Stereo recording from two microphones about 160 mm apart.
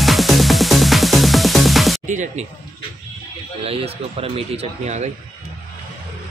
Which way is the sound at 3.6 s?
40° right (ahead or behind).